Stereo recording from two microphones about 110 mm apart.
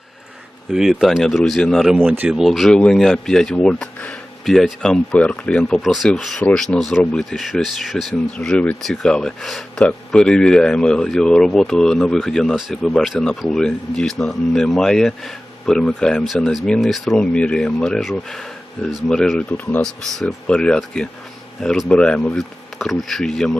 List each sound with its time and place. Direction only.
0.7 s speech: 5° right (ahead or behind)
2.0 s speech: 15° right (ahead or behind)
2.4 s speech: centre (ahead or behind)